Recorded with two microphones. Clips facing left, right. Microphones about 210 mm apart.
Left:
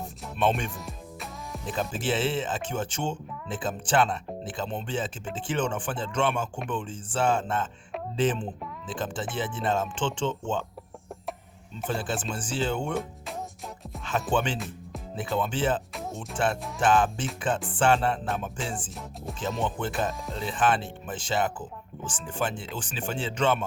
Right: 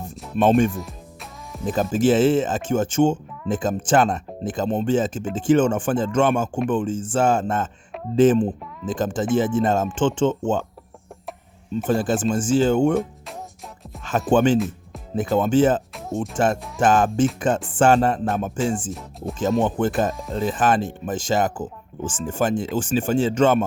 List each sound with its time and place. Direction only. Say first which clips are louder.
0.3 s speech: right 10 dB; 45° right (ahead or behind)
0.7 s music: right 6 dB; centre (ahead or behind)
1.6 s speech: right 11 dB; 45° right (ahead or behind)
11.9 s speech: right 10 dB; 45° right (ahead or behind)
14.3 s speech: right 13 dB; 45° right (ahead or behind)